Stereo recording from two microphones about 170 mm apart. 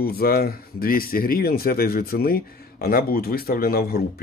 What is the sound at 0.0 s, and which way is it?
Speech, 65° left (ahead or behind).